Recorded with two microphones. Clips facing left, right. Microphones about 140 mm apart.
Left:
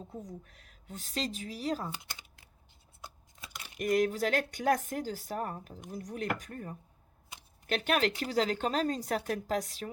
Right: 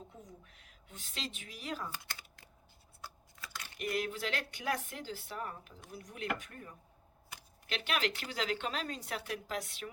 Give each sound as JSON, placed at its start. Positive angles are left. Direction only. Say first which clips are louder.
{"t": 0.1, "sound": "a woman's voice", "louder": "left 9 dB", "side_deg": 40}
{"t": 3.0, "sound": "scissors", "louder": "even", "side_deg": 20}
{"t": 3.8, "sound": "a woman's voice", "louder": "left 8 dB", "side_deg": 40}